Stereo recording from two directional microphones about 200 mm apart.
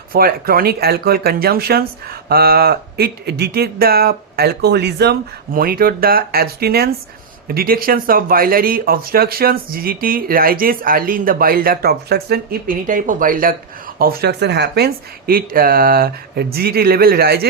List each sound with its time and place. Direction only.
0.1 s speech: 45° right (ahead or behind)